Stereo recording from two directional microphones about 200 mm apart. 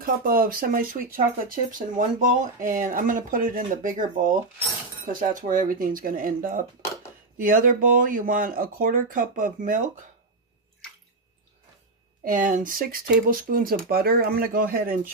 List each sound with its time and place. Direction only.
0.0 s speech: 45° right (ahead or behind)
12.3 s speech: 40° right (ahead or behind)